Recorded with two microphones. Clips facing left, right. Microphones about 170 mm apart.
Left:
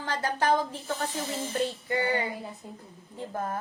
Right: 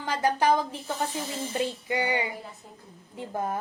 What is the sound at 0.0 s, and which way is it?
A woman's voice, 15° right (ahead or behind).